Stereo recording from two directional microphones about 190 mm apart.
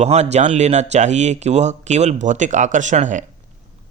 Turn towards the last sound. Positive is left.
turn(degrees=-40)  # may be behind; listen again after turning